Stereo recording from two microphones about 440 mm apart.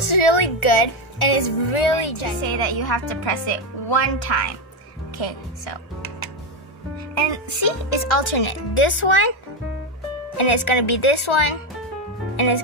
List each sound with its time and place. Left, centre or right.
0.0 s speech: left
7.2 s speech: left
10.3 s speech: left